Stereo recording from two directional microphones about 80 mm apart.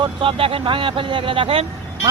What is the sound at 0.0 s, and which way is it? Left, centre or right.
Speech, right.